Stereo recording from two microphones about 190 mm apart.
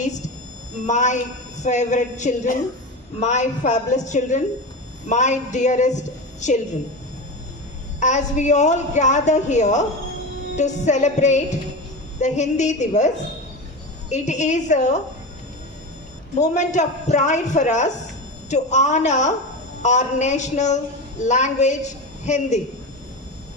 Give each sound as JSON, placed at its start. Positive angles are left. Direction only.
{"t": 0.0, "sound": "a sound", "side_deg": 40}
{"t": 0.9, "sound": "a woman's voice", "side_deg": 40}
{"t": 7.9, "sound": "a woman's voice", "side_deg": 40}
{"t": 14.1, "sound": "a woman's voice", "side_deg": 40}
{"t": 16.4, "sound": "a woman's voice", "side_deg": 40}